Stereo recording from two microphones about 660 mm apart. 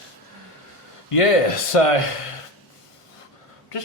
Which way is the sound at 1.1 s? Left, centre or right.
Left.